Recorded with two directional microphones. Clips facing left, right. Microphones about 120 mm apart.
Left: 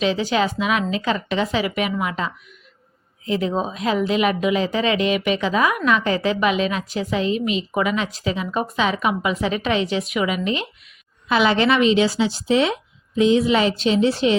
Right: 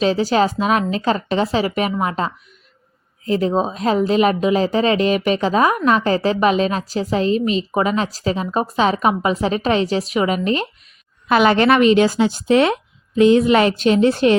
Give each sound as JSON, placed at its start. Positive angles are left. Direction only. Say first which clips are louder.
{"t": 0.0, "sound": "speech", "louder": "right 4 dB", "side_deg": -40}
{"t": 11.3, "sound": "speech", "louder": "right 4 dB", "side_deg": -50}